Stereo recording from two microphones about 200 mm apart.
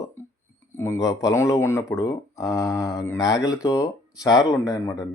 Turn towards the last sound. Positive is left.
turn(degrees=15)  # may be behind; listen again after turning